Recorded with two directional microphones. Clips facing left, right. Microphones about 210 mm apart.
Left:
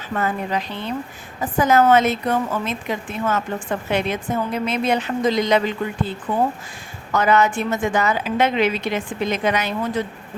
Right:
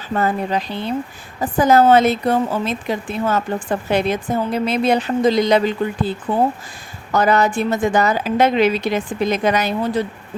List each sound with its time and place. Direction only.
0.1 s a woman's voice: 35° right (ahead or behind)